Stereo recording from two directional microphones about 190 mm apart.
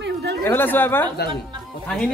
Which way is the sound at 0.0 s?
65° right (ahead or behind).